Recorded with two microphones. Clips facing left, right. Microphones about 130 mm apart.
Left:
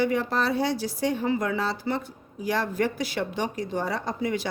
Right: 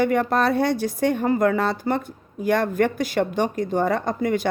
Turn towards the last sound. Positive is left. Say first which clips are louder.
# right 5 dB
turn(degrees=-50)  # may be behind; listen again after turning